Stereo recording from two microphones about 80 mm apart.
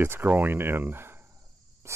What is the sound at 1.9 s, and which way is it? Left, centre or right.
Cricket, right.